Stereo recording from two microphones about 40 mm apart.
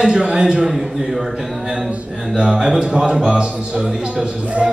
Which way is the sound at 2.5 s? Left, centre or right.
Centre.